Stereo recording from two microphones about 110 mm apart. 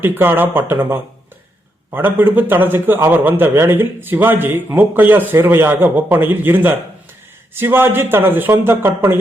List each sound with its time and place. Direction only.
0.0 s a man's voice: 20° right (ahead or behind)